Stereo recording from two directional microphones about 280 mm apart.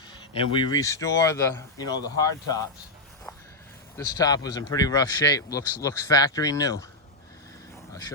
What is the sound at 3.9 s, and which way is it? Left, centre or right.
Speech, centre.